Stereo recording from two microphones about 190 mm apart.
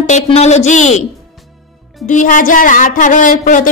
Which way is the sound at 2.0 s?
40° left (ahead or behind).